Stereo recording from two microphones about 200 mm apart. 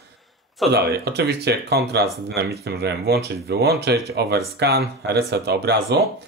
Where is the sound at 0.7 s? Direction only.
55° right (ahead or behind).